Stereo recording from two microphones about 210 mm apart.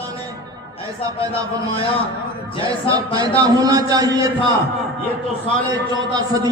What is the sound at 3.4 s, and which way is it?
Speech, 15° right (ahead or behind).